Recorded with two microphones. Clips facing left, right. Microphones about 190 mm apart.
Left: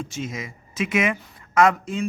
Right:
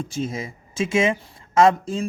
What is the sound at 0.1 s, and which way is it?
Music, 30° right (ahead or behind).